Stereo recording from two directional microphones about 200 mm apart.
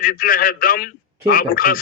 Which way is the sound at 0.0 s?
45° left (ahead or behind).